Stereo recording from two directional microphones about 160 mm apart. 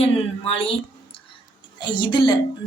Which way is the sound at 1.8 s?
30° left (ahead or behind).